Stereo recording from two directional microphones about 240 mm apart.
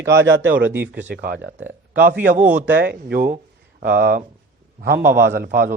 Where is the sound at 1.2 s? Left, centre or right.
Right.